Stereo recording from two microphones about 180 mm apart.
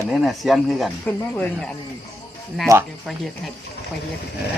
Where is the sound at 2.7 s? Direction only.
20° right (ahead or behind).